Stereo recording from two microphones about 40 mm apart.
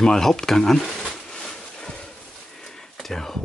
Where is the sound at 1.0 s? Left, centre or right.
Centre.